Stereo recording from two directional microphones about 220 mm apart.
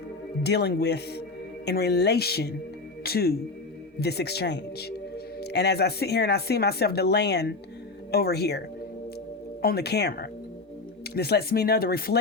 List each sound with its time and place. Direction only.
0.4 s speech: 50° left (ahead or behind)